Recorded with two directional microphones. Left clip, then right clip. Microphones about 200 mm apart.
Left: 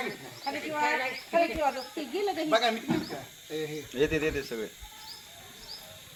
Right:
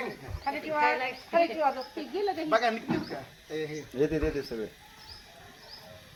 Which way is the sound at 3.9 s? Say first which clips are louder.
Left 1 dB; 55° right (ahead or behind).